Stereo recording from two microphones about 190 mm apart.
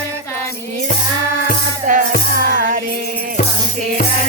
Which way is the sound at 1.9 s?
45° right (ahead or behind).